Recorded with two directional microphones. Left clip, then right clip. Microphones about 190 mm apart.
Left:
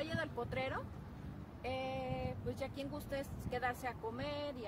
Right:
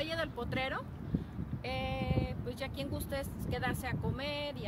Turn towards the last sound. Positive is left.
turn(degrees=10)  # may be behind; listen again after turning